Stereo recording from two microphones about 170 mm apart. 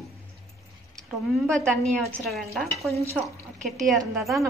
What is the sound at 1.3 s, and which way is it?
A woman's voice, 5° left (ahead or behind).